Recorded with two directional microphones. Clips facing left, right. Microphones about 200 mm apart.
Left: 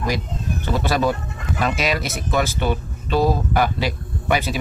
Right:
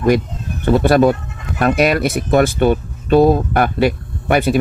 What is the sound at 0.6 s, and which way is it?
Speech, 55° right (ahead or behind).